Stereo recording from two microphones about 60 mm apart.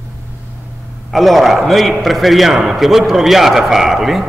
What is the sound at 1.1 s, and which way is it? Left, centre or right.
A man's voice, centre.